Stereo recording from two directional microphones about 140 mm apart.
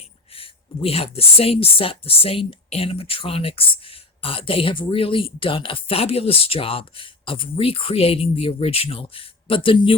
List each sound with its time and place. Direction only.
0.3 s speech: 40° left (ahead or behind)